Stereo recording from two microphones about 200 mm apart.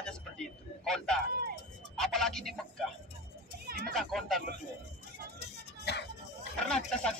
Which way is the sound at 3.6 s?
50° right (ahead or behind).